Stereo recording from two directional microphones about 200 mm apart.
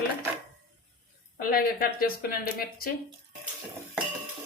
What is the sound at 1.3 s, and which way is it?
Speech, 45° left (ahead or behind).